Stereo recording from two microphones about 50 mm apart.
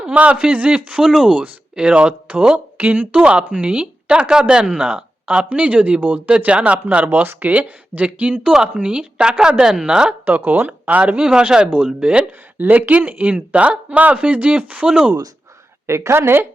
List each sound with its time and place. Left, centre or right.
0.1 s speech: right
1.0 s speech: centre
2.7 s speech: right
3.2 s speech: right
5.5 s speech: right
6.2 s speech: right
7.0 s speech: right; by 10.2 s centre
10.2 s speech: right
10.7 s speech: right
11.3 s speech: centre
12.5 s speech: right
15.9 s a woman's voice: right